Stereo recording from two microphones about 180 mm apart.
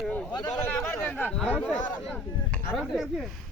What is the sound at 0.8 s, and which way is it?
Speech, 10° left (ahead or behind).